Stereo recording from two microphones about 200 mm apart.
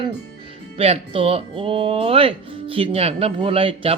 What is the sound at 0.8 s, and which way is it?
Speech, 30° right (ahead or behind).